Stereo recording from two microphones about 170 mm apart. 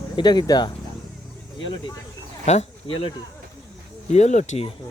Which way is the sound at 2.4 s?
40° left (ahead or behind).